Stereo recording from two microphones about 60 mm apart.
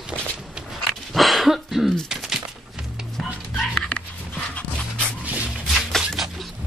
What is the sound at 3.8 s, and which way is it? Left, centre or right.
Dog, left.